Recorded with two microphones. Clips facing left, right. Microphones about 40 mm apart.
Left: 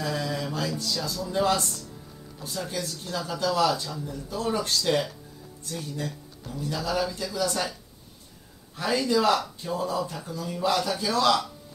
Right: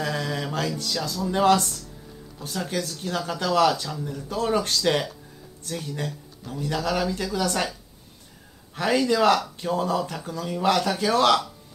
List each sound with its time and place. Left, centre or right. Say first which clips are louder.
0.0 s music: right 2 dB; right
1.3 s speech: right 5 dB; right
8.7 s speech: right 3 dB; right